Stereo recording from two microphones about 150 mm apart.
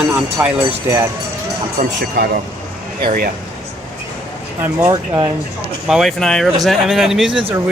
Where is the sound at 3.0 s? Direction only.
80° right.